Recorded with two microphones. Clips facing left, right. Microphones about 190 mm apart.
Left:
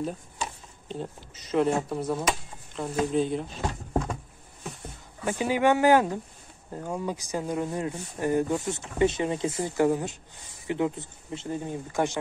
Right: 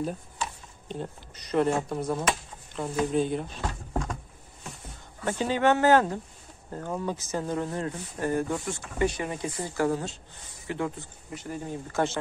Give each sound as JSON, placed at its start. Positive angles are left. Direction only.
{"t": 0.8, "sound": "speech", "side_deg": 0}
{"t": 5.2, "sound": "speech", "side_deg": 10}